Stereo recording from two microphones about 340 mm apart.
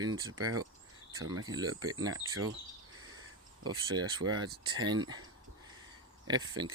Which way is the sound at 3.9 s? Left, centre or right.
Centre.